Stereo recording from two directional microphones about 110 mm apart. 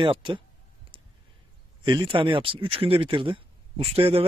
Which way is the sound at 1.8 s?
45° right (ahead or behind).